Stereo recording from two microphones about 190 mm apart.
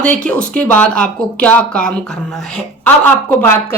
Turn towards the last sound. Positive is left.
turn(degrees=10)  # may be behind; listen again after turning